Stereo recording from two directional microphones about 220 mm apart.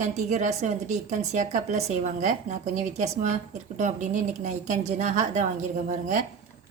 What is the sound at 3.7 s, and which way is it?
A woman's voice, 35° right (ahead or behind).